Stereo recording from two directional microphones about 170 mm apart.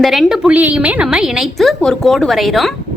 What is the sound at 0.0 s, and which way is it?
A woman's voice, centre (ahead or behind).